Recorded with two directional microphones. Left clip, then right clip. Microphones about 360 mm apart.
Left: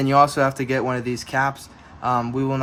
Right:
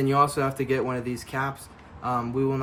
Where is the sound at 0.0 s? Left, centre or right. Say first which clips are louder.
Left 6 dB; left.